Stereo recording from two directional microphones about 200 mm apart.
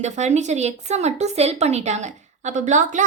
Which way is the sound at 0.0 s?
35° right (ahead or behind).